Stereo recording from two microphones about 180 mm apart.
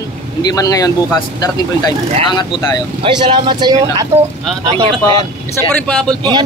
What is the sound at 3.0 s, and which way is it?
Speech, 25° right (ahead or behind).